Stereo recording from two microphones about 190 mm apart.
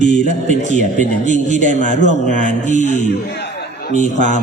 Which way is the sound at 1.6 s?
40° left (ahead or behind).